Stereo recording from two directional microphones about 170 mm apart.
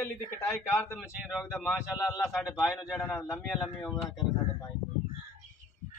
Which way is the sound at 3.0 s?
20° left (ahead or behind).